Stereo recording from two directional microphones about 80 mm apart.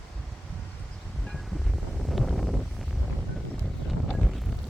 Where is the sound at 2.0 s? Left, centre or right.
Centre.